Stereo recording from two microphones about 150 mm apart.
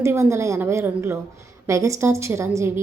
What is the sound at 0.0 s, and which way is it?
A woman's voice, 20° right (ahead or behind).